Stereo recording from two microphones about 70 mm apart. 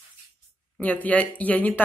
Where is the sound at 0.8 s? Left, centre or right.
Left.